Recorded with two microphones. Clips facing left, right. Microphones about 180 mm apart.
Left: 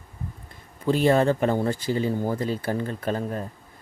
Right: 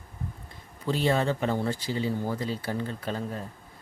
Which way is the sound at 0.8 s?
50° left (ahead or behind).